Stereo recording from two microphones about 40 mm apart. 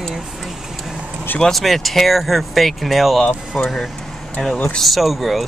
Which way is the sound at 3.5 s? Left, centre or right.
Centre.